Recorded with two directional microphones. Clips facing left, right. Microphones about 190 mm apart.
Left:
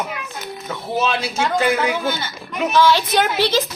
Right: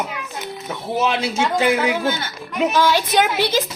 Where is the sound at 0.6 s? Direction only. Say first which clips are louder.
Even; 15° right (ahead or behind).